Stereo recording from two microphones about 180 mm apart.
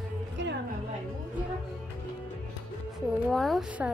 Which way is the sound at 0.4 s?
85° right.